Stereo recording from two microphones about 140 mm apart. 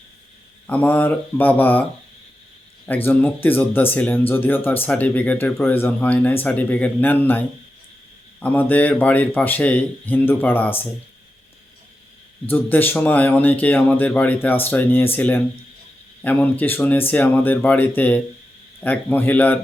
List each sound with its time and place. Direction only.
0.7 s speech: 15° left (ahead or behind)
2.8 s speech: 15° left (ahead or behind)
12.5 s speech: 15° left (ahead or behind)